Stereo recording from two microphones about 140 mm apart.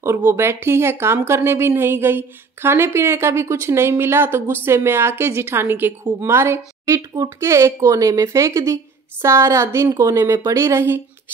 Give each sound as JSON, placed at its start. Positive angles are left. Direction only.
{"t": 0.3, "sound": "a woman's voice", "side_deg": -20}